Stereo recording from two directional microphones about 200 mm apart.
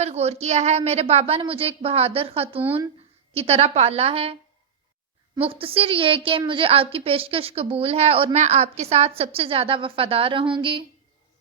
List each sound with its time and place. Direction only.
0.0 s a woman's voice: 30° right (ahead or behind)
5.4 s a woman's voice: 30° right (ahead or behind)